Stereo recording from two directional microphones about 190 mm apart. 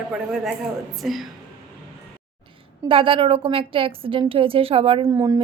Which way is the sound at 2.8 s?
30° right (ahead or behind).